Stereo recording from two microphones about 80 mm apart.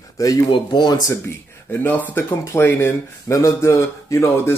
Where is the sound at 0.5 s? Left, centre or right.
Left.